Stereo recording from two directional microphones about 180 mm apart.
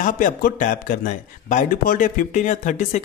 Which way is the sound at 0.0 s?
45° left (ahead or behind).